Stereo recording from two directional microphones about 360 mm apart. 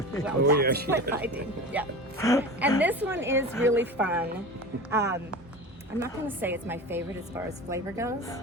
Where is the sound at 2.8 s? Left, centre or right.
Centre.